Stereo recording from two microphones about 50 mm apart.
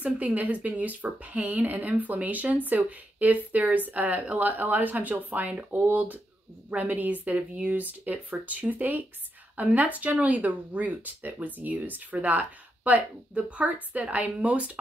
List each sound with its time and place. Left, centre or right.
0.0 s speech: right